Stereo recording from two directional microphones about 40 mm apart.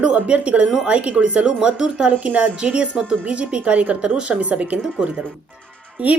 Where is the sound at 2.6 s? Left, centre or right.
Right.